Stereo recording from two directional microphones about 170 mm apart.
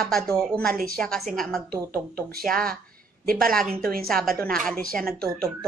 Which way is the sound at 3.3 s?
55° right (ahead or behind).